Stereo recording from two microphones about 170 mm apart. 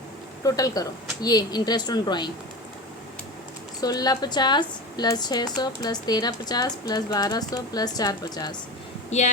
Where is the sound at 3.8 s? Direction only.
25° left (ahead or behind).